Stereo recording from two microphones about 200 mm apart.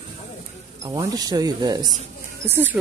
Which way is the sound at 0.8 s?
20° right (ahead or behind).